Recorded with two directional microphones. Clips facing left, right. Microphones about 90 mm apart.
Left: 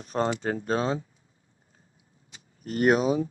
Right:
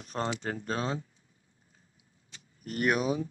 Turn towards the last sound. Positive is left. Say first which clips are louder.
# left 6 dB
turn(degrees=30)  # may be behind; listen again after turning